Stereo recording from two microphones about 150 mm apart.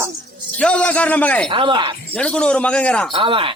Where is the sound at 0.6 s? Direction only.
10° left (ahead or behind).